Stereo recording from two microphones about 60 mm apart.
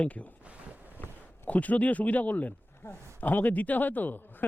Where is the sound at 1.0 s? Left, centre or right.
Left.